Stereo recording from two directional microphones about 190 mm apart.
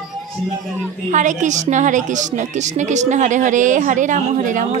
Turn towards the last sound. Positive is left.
turn(degrees=-40)  # may be behind; listen again after turning